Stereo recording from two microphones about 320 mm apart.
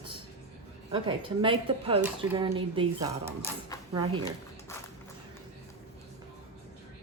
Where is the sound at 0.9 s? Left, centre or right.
Centre.